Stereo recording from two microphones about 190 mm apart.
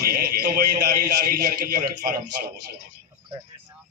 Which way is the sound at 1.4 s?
50° right (ahead or behind).